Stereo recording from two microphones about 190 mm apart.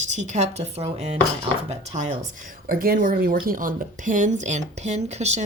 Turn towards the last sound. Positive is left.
turn(degrees=-35)  # may be behind; listen again after turning